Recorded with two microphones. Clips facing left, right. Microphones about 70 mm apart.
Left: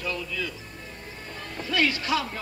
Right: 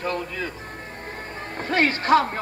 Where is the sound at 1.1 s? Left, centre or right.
Right.